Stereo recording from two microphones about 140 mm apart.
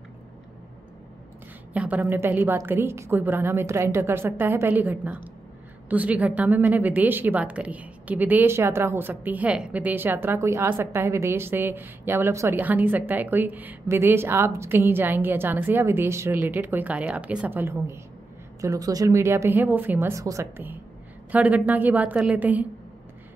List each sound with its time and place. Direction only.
1.7 s a woman's voice: 10° right (ahead or behind)